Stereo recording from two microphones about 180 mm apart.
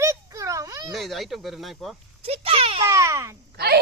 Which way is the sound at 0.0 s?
20° right (ahead or behind).